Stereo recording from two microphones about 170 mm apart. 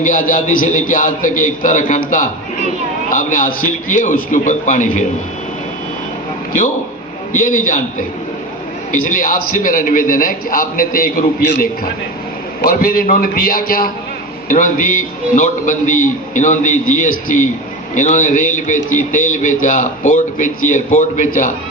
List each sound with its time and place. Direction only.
0.0 s a man's voice: 50° left (ahead or behind)
7.3 s a man's voice: 50° left (ahead or behind)
8.9 s a man's voice: 50° left (ahead or behind)